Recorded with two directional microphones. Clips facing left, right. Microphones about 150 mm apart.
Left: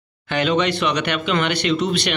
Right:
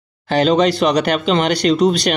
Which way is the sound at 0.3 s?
35° right (ahead or behind).